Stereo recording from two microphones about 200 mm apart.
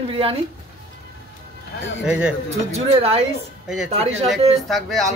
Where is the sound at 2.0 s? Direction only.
5° right (ahead or behind).